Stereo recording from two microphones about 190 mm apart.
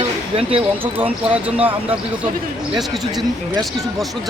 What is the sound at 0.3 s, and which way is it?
Speech, 30° right (ahead or behind).